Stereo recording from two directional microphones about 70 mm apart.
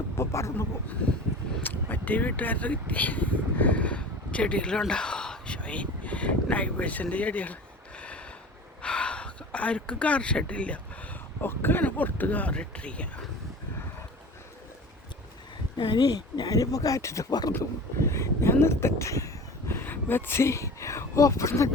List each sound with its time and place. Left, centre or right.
0.2 s a sound: left
1.6 s speech: left
7.9 s a sound: centre
11.3 s speech: left
16.0 s speech: left
16.6 s speech: left
19.7 s speech: left